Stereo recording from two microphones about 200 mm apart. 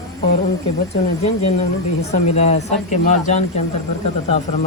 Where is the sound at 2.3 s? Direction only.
30° left (ahead or behind).